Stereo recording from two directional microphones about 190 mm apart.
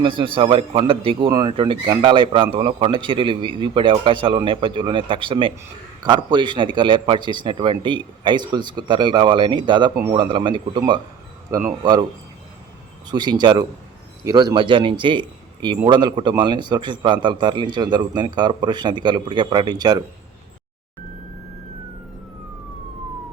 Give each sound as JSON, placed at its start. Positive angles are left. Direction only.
{"t": 0.0, "sound": "a man's voice", "side_deg": -25}
{"t": 13.1, "sound": "a man's voice", "side_deg": -25}